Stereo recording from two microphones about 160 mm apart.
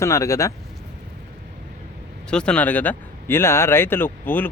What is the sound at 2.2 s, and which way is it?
Speech, 5° left (ahead or behind).